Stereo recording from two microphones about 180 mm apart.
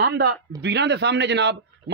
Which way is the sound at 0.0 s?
65° right (ahead or behind).